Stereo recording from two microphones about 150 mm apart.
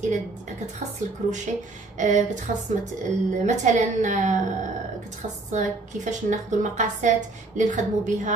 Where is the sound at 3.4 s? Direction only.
55° right (ahead or behind).